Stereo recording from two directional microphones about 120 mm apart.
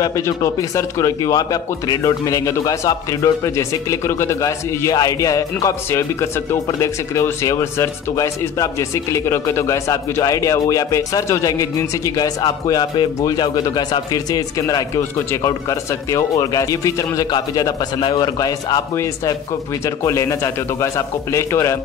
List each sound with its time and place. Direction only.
0.0 s a man's voice: 30° left (ahead or behind)
20.0 s a man's voice: 25° left (ahead or behind)